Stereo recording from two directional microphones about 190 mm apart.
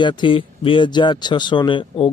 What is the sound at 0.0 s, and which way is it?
Speech, 25° left (ahead or behind).